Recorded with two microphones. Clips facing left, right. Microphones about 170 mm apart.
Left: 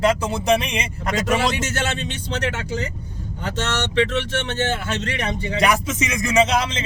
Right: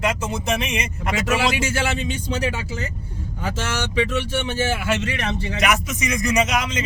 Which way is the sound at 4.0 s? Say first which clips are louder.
Left 1 dB; 10° right (ahead or behind).